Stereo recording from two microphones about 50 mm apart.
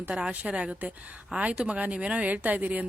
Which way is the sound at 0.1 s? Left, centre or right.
Centre.